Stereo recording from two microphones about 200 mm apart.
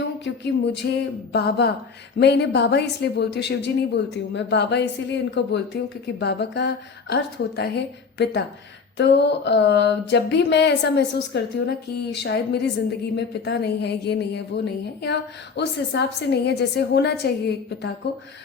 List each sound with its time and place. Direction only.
0.4 s speech: 60° left (ahead or behind)